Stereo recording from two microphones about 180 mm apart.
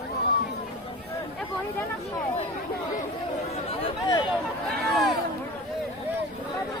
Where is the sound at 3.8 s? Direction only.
20° left (ahead or behind).